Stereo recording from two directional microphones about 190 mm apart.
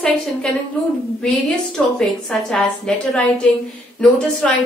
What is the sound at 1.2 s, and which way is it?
A woman's voice, 5° left (ahead or behind).